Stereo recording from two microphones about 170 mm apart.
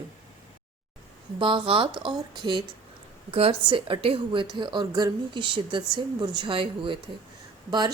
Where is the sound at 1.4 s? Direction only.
30° right (ahead or behind).